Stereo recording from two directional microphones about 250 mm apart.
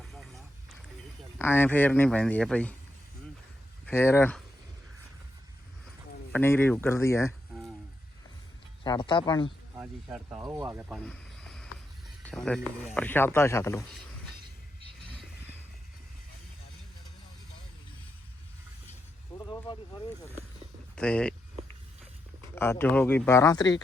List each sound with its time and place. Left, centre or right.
0.0 s vehicle: centre
1.4 s speech: centre
3.8 s speech: centre
6.3 s speech: centre
8.8 s speech: centre
9.7 s speech: centre
15.1 s vehicle: centre
19.4 s a sound: centre
20.9 s speech: centre
22.5 s speech: centre